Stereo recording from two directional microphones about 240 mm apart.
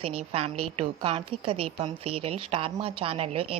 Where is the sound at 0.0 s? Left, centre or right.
Right.